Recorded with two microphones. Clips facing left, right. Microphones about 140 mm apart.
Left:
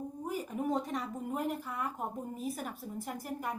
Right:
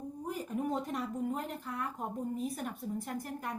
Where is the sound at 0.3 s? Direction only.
5° left (ahead or behind).